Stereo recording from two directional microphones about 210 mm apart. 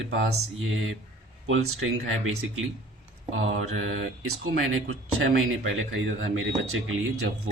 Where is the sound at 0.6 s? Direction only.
70° right (ahead or behind).